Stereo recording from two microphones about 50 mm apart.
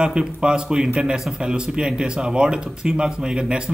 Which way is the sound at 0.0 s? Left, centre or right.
Centre.